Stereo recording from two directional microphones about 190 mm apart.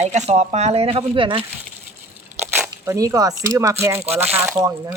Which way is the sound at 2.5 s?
15° right (ahead or behind).